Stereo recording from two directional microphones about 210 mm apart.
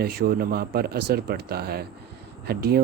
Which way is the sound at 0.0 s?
45° right (ahead or behind).